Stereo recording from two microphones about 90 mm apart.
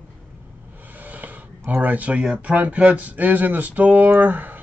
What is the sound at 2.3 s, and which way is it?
Speech, 15° right (ahead or behind).